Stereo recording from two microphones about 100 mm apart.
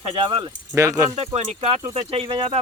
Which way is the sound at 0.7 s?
35° right (ahead or behind).